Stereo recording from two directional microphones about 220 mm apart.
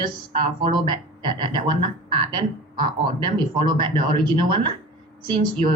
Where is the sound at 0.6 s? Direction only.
20° right (ahead or behind).